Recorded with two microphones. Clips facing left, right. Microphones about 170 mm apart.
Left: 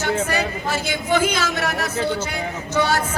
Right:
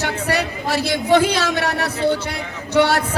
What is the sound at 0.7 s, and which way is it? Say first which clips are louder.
Speech: right 6 dB; 35° right (ahead or behind).